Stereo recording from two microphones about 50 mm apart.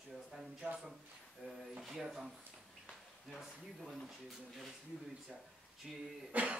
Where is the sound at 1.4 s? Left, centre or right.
Right.